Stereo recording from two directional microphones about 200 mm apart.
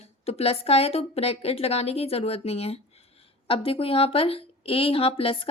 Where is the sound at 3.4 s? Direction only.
25° left (ahead or behind).